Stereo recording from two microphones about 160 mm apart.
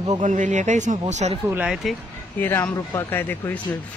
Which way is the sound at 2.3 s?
10° left (ahead or behind).